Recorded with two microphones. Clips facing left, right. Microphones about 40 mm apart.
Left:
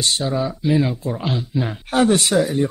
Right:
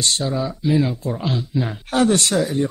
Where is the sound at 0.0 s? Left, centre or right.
Centre.